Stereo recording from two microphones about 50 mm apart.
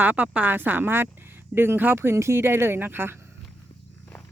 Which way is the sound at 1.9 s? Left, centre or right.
Right.